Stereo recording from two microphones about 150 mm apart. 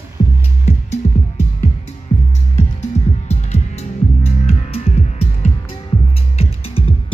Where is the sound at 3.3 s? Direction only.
45° left (ahead or behind).